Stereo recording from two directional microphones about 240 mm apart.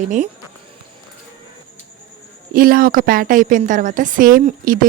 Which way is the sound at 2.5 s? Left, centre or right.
Right.